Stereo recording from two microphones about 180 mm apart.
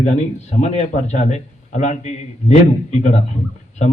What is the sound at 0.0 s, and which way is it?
A man's voice, 40° left (ahead or behind).